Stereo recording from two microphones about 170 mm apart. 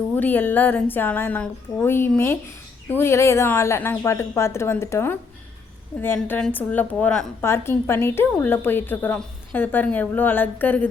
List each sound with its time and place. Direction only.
0.2 s a woman's voice: 10° left (ahead or behind)